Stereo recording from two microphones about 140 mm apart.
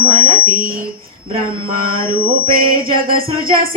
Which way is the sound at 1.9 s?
35° right (ahead or behind).